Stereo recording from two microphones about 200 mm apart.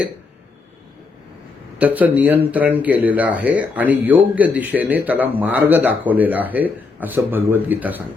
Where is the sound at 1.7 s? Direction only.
10° right (ahead or behind).